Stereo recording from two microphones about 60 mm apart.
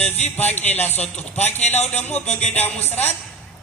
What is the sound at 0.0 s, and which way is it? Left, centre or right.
A man's voice, left.